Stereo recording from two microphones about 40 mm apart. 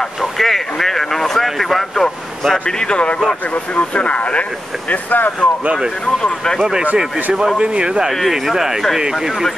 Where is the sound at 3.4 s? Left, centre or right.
Left.